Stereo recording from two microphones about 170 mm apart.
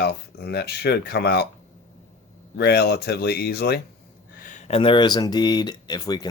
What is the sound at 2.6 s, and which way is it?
Speech, 70° left (ahead or behind).